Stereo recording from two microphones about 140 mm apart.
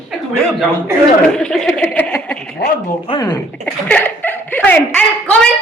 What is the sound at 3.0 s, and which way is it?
Speech, 30° left (ahead or behind).